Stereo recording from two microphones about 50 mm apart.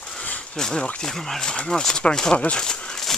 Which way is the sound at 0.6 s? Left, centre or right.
Centre.